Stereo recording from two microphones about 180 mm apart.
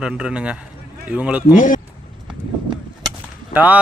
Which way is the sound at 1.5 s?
45° left (ahead or behind).